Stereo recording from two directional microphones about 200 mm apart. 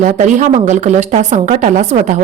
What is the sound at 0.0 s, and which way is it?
A woman's voice, 40° right (ahead or behind).